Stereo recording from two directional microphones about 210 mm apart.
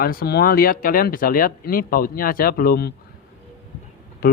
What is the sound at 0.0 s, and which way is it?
Speech, 45° left (ahead or behind).